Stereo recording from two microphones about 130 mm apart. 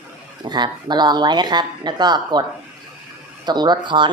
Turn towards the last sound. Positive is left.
turn(degrees=-35)  # may be behind; listen again after turning